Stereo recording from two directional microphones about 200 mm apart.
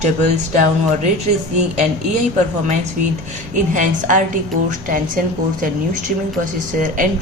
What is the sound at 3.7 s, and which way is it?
A woman's voice, 40° right (ahead or behind).